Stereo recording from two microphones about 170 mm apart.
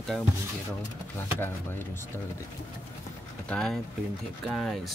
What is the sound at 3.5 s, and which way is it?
Speech, 5° left (ahead or behind).